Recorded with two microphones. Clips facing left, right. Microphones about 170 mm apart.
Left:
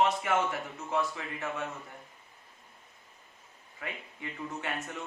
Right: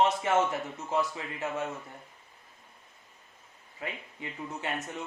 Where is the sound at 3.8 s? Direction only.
20° right (ahead or behind).